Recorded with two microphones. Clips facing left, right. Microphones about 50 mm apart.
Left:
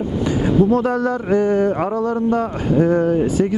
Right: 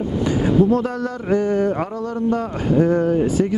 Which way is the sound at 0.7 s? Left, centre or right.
Left.